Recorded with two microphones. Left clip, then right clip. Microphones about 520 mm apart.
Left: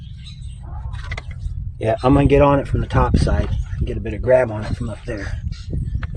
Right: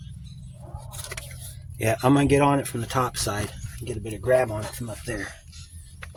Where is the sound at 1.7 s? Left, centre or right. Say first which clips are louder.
Left 5 dB; right.